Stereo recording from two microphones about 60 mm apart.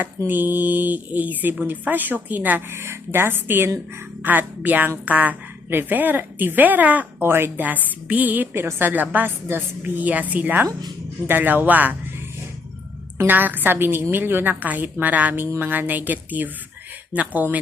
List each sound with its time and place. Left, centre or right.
0.3 s speech: right
2.7 s a woman's voice: right
7.2 s speech: right
7.6 s a woman's voice: right
8.5 s a woman's voice: right
8.9 s a woman's voice: right
13.2 s a woman's voice: right